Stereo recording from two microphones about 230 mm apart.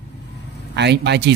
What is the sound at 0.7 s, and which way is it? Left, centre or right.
Speech, right.